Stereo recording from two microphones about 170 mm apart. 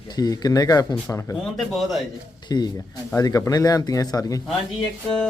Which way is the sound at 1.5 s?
Centre (ahead or behind).